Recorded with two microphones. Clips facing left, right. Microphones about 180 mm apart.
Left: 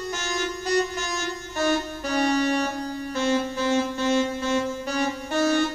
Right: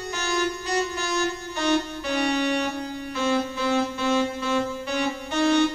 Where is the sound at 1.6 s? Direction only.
40° left (ahead or behind).